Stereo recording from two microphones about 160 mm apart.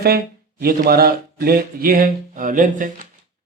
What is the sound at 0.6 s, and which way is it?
A man's voice, 65° right (ahead or behind).